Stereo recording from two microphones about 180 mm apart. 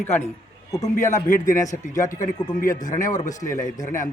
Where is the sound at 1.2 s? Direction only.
45° left (ahead or behind).